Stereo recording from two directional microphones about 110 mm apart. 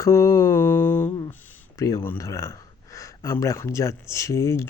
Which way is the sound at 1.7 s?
30° left (ahead or behind).